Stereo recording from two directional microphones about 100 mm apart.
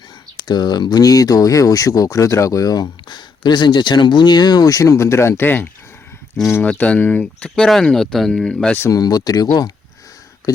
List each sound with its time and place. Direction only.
0.3 s speech: 45° left (ahead or behind); by 8.7 s 5° left (ahead or behind)
8.9 s speech: 40° left (ahead or behind)